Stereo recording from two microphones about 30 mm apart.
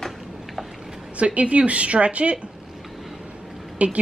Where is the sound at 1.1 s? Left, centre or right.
Right.